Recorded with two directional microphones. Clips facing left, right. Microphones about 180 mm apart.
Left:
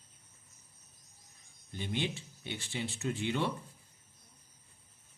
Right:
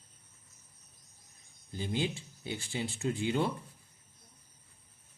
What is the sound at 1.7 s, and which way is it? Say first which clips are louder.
Speech: right 2 dB; 30° right (ahead or behind).